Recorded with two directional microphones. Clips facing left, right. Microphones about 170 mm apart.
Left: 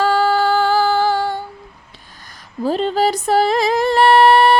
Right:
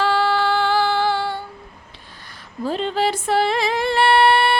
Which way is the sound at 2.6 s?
40° left (ahead or behind).